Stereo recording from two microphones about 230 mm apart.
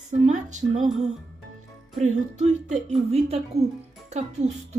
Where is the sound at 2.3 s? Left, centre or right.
Right.